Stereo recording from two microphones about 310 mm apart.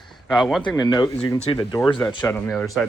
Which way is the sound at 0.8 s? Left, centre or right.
Centre.